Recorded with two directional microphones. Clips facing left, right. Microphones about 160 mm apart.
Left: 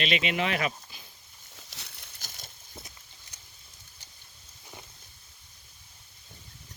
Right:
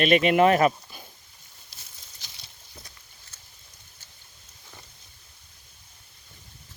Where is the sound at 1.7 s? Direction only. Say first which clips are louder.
Left 4 dB; 70° left (ahead or behind).